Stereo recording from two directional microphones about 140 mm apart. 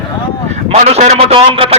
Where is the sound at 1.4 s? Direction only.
40° right (ahead or behind).